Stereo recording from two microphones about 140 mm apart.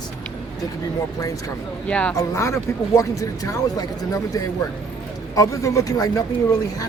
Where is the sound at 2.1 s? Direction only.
20° left (ahead or behind).